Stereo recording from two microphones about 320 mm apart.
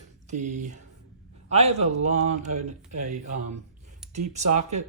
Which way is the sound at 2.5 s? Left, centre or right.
Right.